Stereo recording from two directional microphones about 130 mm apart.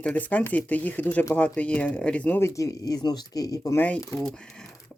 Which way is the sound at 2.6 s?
30° left (ahead or behind).